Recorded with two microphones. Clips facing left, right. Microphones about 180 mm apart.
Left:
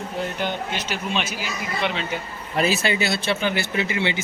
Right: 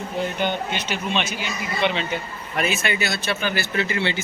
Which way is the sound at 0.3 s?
Centre (ahead or behind).